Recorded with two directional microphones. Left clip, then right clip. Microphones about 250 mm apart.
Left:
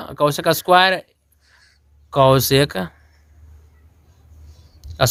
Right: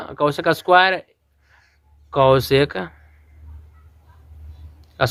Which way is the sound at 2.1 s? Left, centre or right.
Left.